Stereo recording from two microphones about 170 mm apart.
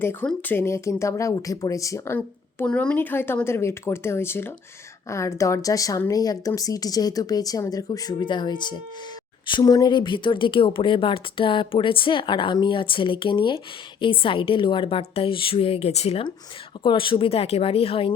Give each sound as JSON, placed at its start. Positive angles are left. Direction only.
{"t": 0.0, "sound": "a woman's voice", "side_deg": 10}